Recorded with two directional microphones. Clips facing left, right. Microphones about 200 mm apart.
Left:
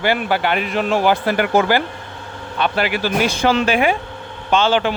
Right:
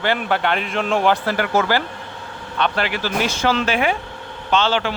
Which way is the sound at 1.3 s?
15° left (ahead or behind).